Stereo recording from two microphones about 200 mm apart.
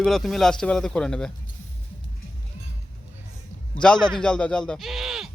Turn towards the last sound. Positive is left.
turn(degrees=0)  # may be behind; listen again after turning